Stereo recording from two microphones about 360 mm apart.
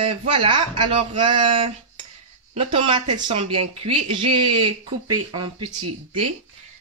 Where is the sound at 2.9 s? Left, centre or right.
Centre.